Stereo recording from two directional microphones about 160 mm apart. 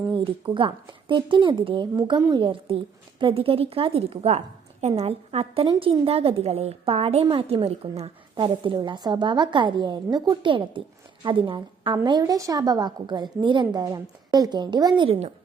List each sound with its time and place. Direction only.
0.1 s a woman's voice: 30° right (ahead or behind)